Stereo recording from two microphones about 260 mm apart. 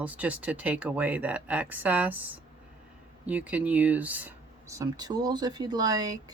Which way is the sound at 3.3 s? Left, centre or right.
Centre.